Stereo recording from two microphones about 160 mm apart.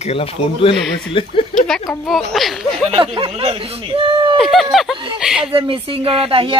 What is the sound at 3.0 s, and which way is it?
Speech, 35° right (ahead or behind).